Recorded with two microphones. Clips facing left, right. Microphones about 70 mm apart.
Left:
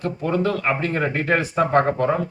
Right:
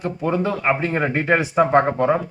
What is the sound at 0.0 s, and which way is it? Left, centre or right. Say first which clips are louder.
Speech: even; centre.